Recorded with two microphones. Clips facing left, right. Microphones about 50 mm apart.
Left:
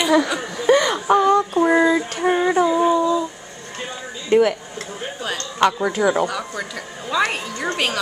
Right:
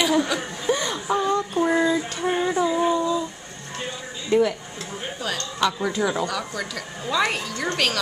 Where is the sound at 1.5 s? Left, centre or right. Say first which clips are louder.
Left 5 dB; left.